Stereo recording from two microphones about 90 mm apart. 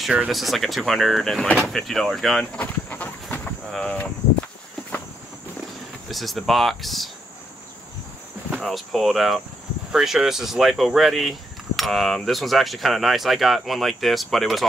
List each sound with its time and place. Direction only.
0.3 s speech: centre (ahead or behind)
2.6 s a sound: 20° left (ahead or behind)
3.7 s speech: 10° left (ahead or behind)
6.0 s speech: centre (ahead or behind)
8.5 s speech: 5° right (ahead or behind)